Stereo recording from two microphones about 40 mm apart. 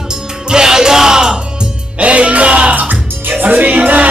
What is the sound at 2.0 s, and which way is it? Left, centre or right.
Music, right.